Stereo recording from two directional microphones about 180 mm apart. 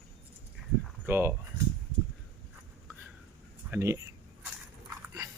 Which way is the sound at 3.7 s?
15° right (ahead or behind).